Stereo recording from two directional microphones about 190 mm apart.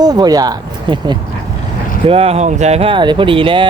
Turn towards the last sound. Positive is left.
turn(degrees=-25)  # may be behind; listen again after turning